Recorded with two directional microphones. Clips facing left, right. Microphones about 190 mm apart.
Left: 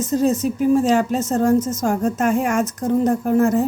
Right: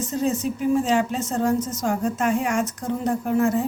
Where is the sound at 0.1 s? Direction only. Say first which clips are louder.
Left 6 dB; 40° left (ahead or behind).